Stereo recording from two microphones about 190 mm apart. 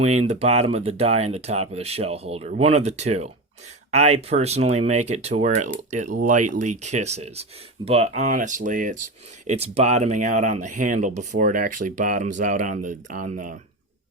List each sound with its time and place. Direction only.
0.0 s speech: 35° right (ahead or behind)